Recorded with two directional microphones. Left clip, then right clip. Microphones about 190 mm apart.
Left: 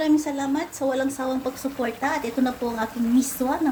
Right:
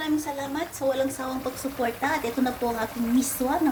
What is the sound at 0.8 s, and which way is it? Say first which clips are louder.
A woman's voice: even; 20° left (ahead or behind).